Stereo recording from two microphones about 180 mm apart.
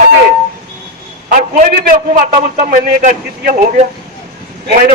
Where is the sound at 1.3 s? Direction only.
45° right (ahead or behind).